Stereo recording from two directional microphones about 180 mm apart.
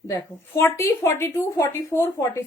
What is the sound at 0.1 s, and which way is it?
A woman's voice, 15° left (ahead or behind).